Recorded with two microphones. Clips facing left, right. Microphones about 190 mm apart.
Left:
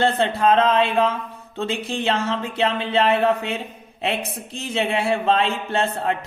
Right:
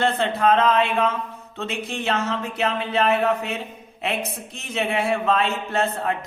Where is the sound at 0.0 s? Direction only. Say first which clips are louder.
Left 2 dB; 30° left (ahead or behind).